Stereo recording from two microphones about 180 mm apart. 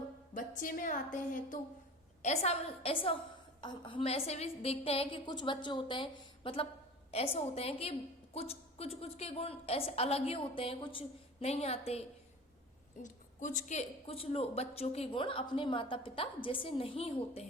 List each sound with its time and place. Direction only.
0.3 s a woman's voice: 45° left (ahead or behind)
13.0 s a woman's voice: 45° left (ahead or behind)